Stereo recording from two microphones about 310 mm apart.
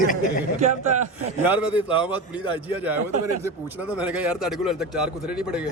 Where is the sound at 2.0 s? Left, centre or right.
Centre.